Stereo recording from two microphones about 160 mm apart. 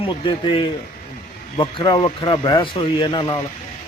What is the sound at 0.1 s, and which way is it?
Speech, 30° left (ahead or behind).